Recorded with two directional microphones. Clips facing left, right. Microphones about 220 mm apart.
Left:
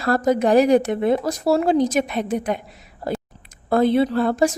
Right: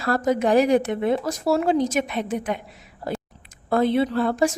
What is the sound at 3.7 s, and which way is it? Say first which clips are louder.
Speech: left 3 dB; 40° left (ahead or behind).